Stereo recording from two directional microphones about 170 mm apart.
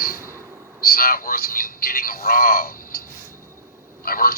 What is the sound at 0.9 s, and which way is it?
A man's voice, 60° left (ahead or behind).